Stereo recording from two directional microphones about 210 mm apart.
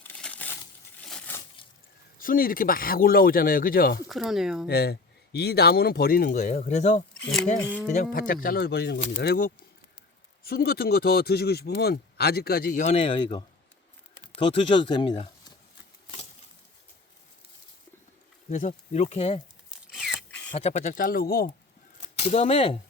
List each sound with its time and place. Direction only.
0.0 s crumpling: 5° left (ahead or behind)
2.1 s speech: 40° left (ahead or behind)
4.1 s speech: centre (ahead or behind)
4.7 s speech: 50° left (ahead or behind)
7.2 s speech: centre (ahead or behind)
7.9 s speech: 40° left (ahead or behind)
10.5 s speech: 45° left (ahead or behind); by 15.5 s 25° left (ahead or behind)
18.4 s speech: 35° left (ahead or behind)
19.9 s a sound: centre (ahead or behind)
20.5 s speech: 30° left (ahead or behind)
22.2 s speech: 30° left (ahead or behind)